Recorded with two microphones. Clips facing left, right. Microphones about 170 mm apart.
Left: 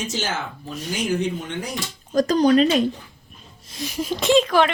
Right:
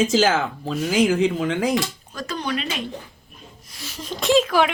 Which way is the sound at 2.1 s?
40° left (ahead or behind).